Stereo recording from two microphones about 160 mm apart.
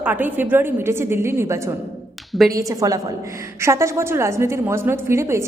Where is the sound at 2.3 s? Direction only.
Centre (ahead or behind).